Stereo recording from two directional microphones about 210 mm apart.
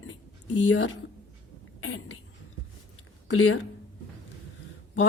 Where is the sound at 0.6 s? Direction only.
70° left (ahead or behind).